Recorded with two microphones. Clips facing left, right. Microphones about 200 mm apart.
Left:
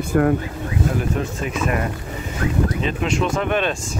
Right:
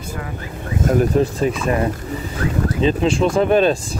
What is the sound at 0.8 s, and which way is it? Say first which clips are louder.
Speech: right 8 dB; 40° right (ahead or behind).